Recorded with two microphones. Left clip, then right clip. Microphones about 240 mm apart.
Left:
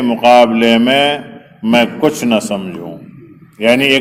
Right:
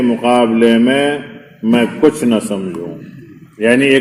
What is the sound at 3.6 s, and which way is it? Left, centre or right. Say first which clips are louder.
Speech: even; centre.